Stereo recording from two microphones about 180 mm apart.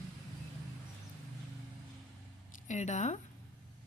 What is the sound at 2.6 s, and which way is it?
Speech, 40° left (ahead or behind).